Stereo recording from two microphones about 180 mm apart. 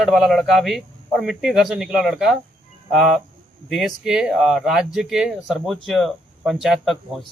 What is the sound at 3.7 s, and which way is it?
Speech, centre (ahead or behind).